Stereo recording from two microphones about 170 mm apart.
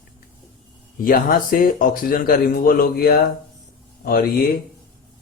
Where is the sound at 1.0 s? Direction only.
55° left (ahead or behind).